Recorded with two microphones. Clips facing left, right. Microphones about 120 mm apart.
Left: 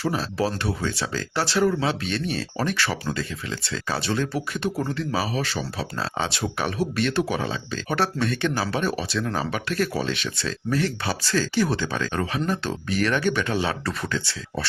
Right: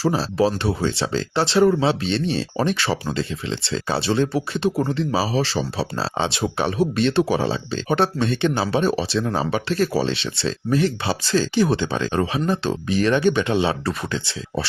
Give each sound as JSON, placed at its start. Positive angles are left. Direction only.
{"t": 0.0, "sound": "speech", "side_deg": -30}